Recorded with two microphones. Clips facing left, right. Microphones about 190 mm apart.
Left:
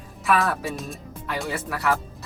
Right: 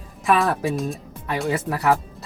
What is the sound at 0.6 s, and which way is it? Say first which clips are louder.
Speech: right 7 dB; centre (ahead or behind).